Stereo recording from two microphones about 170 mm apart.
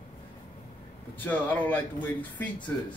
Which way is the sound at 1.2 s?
10° left (ahead or behind).